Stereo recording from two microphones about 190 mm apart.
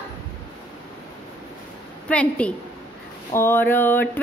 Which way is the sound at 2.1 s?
5° left (ahead or behind).